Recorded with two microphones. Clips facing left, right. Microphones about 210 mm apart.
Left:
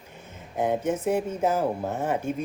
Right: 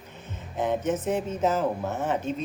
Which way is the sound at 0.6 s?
10° left (ahead or behind).